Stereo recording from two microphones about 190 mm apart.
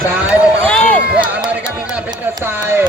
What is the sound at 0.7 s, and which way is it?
Run, 5° left (ahead or behind).